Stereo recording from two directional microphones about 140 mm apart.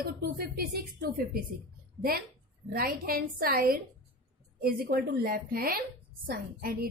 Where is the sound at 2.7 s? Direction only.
90° right.